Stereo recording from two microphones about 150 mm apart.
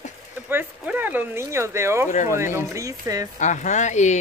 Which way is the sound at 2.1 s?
55° left (ahead or behind).